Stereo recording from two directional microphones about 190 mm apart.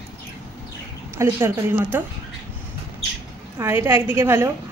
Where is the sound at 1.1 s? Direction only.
10° right (ahead or behind).